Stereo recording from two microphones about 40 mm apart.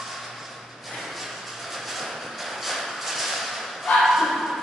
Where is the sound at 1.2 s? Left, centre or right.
Centre.